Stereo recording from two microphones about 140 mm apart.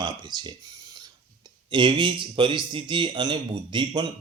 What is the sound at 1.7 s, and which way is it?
Speech, 35° right (ahead or behind).